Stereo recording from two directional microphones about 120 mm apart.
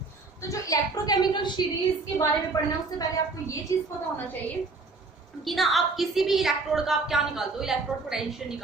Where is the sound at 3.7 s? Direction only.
25° left (ahead or behind).